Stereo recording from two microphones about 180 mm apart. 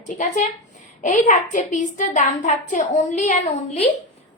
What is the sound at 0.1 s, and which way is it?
A child's voice, 40° left (ahead or behind).